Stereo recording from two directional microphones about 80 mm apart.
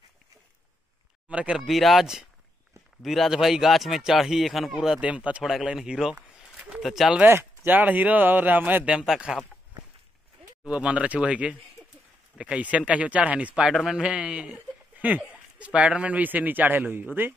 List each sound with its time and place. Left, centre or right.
1.3 s speech: centre
1.6 s a man's voice: centre
5.4 s a man's voice: centre
5.8 s a sound: centre
6.8 s speech: centre
7.2 s speech: right
8.9 s speech: centre
10.6 s speech: centre
11.8 s a sound: centre
12.4 s speech: centre
13.7 s speech: centre; by 17.3 s right